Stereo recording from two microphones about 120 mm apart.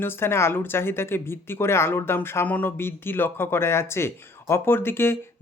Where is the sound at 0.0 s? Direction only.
20° left (ahead or behind).